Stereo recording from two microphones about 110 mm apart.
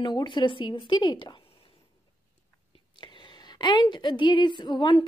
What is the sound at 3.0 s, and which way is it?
A woman's voice, 45° left (ahead or behind).